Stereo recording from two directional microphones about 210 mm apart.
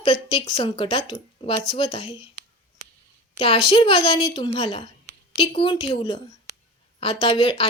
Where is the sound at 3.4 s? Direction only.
25° left (ahead or behind).